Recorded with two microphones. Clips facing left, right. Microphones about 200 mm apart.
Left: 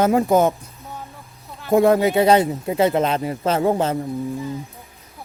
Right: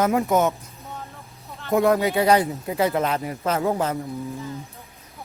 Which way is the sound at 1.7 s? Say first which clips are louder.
Left 4 dB; 25° left (ahead or behind).